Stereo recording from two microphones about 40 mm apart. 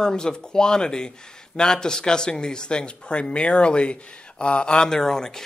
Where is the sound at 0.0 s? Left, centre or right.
Centre.